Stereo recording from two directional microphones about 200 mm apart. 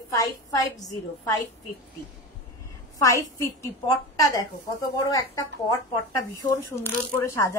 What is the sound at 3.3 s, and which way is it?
Speech, 15° left (ahead or behind).